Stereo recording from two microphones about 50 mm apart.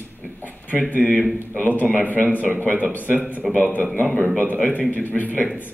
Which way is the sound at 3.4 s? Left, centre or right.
Centre.